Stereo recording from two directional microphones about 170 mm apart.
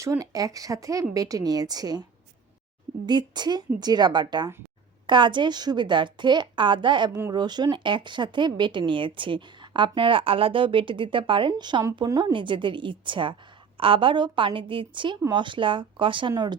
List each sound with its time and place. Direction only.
0.0 s speech: 20° right (ahead or behind)
3.1 s speech: 25° right (ahead or behind)